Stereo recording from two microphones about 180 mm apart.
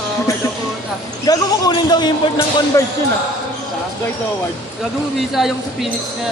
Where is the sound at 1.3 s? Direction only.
20° left (ahead or behind).